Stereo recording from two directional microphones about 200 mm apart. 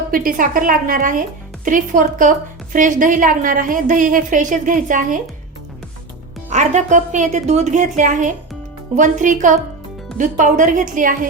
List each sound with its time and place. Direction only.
0.1 s a woman's voice: 45° right (ahead or behind)
6.5 s a woman's voice: 35° right (ahead or behind)